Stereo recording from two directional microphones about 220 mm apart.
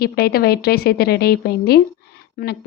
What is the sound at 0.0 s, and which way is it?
A woman's voice, 45° left (ahead or behind).